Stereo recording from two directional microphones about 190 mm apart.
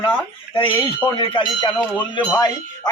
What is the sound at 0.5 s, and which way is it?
Speech, 25° left (ahead or behind).